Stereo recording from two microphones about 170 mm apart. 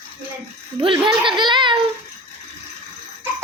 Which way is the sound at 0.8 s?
30° right (ahead or behind).